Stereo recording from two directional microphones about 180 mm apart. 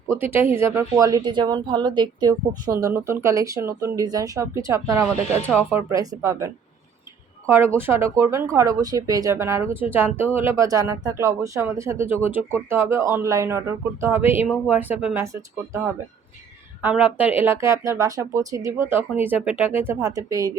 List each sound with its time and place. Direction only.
0.1 s a woman's voice: 10° right (ahead or behind)
16.8 s speech: 10° right (ahead or behind)